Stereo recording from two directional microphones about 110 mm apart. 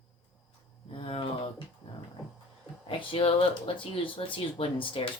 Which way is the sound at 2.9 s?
55° left (ahead or behind).